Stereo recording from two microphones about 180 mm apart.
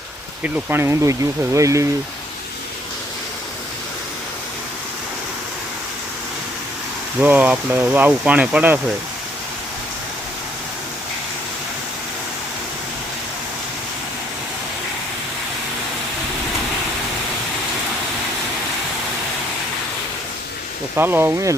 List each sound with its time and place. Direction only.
0.4 s speech: 10° right (ahead or behind)
7.2 s speech: 10° right (ahead or behind)
20.9 s speech: 10° right (ahead or behind)